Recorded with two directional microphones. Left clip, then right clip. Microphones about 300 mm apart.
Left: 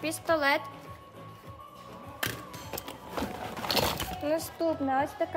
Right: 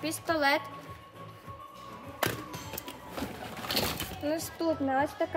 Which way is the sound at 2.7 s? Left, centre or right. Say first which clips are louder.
Left 3 dB; left.